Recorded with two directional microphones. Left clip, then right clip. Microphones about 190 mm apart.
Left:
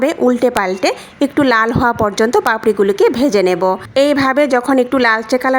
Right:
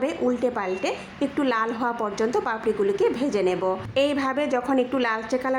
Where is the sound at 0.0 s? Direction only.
45° left (ahead or behind).